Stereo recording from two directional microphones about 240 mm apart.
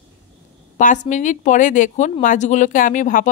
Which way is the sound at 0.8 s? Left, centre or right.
Left.